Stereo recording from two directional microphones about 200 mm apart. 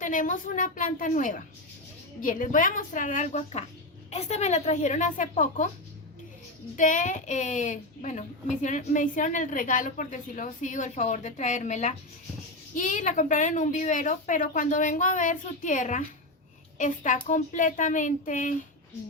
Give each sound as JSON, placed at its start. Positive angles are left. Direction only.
{"t": 0.0, "sound": "a woman's voice", "side_deg": 40}
{"t": 6.7, "sound": "a woman's voice", "side_deg": 40}